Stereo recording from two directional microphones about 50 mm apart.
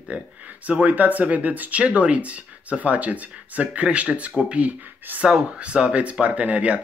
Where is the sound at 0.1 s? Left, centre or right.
Right.